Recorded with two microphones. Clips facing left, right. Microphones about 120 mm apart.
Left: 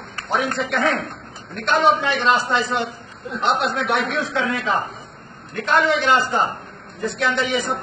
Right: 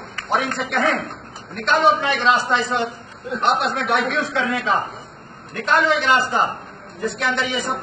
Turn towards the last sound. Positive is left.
turn(degrees=0)  # may be behind; listen again after turning